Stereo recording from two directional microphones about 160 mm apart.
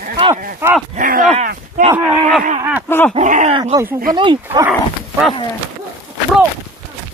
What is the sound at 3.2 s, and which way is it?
Speech, 50° right (ahead or behind).